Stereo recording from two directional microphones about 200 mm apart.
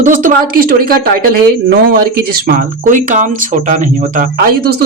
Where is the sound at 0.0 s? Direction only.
40° right (ahead or behind).